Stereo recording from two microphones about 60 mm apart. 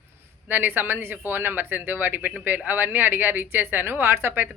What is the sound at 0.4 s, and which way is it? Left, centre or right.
A woman's voice, right.